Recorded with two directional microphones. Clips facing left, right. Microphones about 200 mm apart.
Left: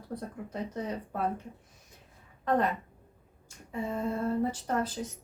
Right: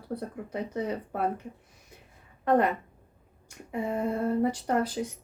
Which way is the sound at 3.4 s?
60° right (ahead or behind).